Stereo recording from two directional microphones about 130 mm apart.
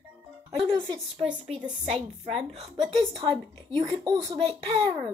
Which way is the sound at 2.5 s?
40° right (ahead or behind).